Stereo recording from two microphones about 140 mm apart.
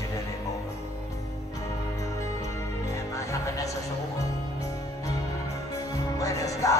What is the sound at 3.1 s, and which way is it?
Music, 20° left (ahead or behind).